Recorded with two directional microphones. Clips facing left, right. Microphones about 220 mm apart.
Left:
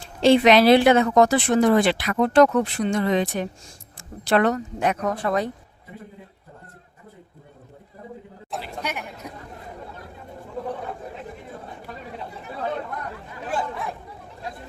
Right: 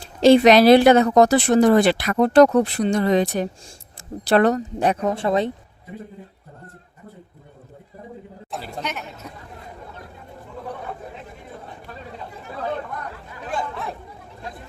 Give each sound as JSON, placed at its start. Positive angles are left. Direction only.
{"t": 0.2, "sound": "speech", "side_deg": -40}
{"t": 8.8, "sound": "a woman's voice", "side_deg": 10}